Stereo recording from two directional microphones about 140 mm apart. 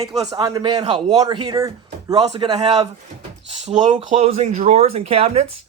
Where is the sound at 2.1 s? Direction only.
45° right (ahead or behind).